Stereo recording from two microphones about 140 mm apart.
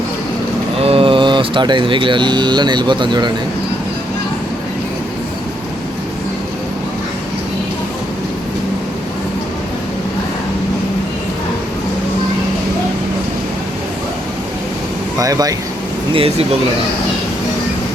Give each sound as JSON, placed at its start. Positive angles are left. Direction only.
{"t": 0.8, "sound": "speech", "side_deg": -40}
{"t": 15.2, "sound": "speech", "side_deg": -25}
{"t": 16.1, "sound": "speech", "side_deg": -40}